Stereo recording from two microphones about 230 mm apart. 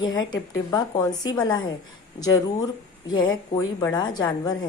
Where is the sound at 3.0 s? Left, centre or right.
Centre.